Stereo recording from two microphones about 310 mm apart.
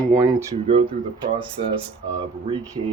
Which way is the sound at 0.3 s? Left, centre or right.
Centre.